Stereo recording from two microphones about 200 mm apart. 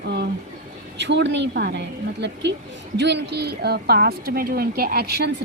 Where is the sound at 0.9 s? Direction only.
60° right (ahead or behind).